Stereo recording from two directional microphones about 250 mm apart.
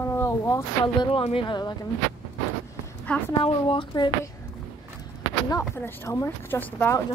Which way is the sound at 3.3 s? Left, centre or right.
Left.